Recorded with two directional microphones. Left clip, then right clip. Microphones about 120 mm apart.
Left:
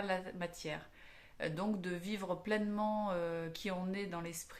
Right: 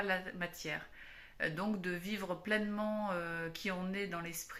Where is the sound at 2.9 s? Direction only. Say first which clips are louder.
Right 1 dB; 25° left (ahead or behind).